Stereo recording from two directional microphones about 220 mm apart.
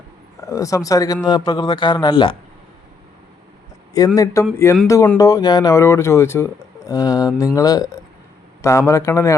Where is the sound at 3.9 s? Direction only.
15° left (ahead or behind).